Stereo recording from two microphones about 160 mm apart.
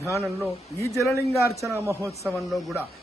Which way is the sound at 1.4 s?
20° left (ahead or behind).